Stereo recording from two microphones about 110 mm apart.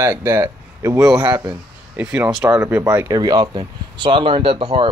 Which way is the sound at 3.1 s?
35° right (ahead or behind).